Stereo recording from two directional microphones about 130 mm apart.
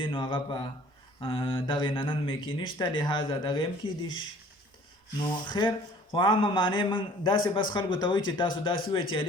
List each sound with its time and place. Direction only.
0.0 s a man's voice: 40° left (ahead or behind)
5.5 s a man's voice: 35° left (ahead or behind)